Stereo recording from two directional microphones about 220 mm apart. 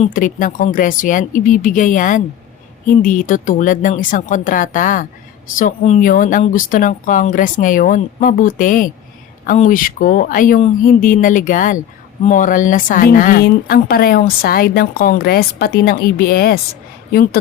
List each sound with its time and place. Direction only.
0.0 s a woman's voice: 35° left (ahead or behind)